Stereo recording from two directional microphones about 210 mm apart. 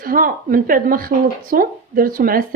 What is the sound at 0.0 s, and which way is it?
Speech, 40° right (ahead or behind).